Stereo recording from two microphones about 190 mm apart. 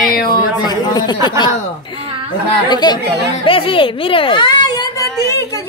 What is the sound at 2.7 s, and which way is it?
Speech, 20° left (ahead or behind).